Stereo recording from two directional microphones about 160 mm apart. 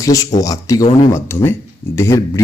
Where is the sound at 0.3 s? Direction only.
20° left (ahead or behind).